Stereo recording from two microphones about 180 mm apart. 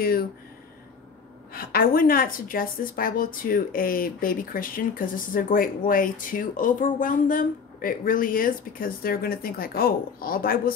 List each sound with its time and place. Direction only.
0.0 s speech: 55° left (ahead or behind)
1.5 s a woman's voice: 55° left (ahead or behind)